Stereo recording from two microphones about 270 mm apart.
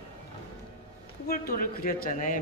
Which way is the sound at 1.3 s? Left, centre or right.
Left.